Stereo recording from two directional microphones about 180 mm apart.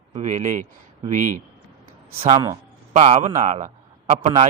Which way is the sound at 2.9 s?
40° right (ahead or behind).